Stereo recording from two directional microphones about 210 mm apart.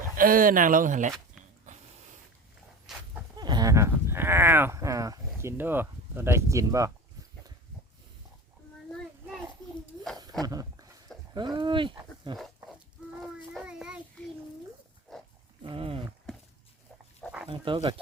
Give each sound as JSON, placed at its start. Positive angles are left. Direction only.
{"t": 0.2, "sound": "speech", "side_deg": -40}
{"t": 2.9, "sound": "a sound", "side_deg": 0}
{"t": 3.3, "sound": "speech", "side_deg": -20}
{"t": 10.4, "sound": "speech", "side_deg": -15}
{"t": 13.2, "sound": "child singing", "side_deg": -5}
{"t": 15.1, "sound": "livestock", "side_deg": 0}
{"t": 15.6, "sound": "speech", "side_deg": -25}
{"t": 17.5, "sound": "speech", "side_deg": -25}